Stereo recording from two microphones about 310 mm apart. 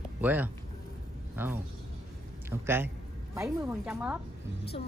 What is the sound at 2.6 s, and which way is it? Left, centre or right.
Speech, centre.